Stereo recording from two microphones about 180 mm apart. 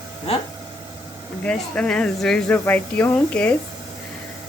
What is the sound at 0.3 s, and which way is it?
Speech, 35° left (ahead or behind).